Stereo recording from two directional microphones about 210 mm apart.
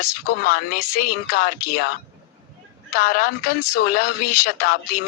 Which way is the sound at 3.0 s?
45° left (ahead or behind).